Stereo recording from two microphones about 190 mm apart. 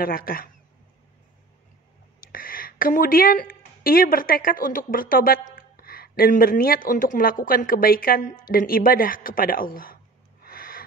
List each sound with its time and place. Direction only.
0.0 s speech: 50° left (ahead or behind)
2.1 s speech: 50° left (ahead or behind)
10.4 s owl: 50° left (ahead or behind)